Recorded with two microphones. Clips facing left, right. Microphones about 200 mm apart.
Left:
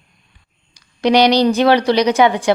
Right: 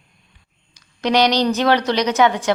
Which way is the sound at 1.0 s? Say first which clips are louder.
Left 4 dB; 10° left (ahead or behind).